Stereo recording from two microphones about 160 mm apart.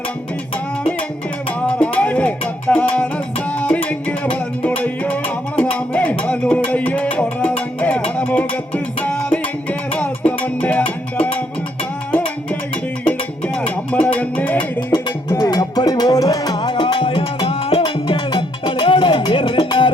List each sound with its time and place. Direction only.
1.5 s music: 10° left (ahead or behind)
13.1 s music: 5° left (ahead or behind)
14.9 s music: 25° left (ahead or behind)